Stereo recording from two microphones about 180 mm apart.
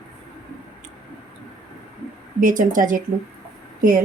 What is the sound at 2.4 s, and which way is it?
Speech, 45° right (ahead or behind).